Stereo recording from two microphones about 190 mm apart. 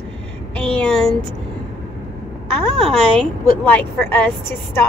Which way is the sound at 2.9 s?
5° left (ahead or behind).